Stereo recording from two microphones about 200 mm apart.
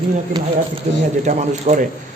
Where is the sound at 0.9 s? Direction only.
30° right (ahead or behind).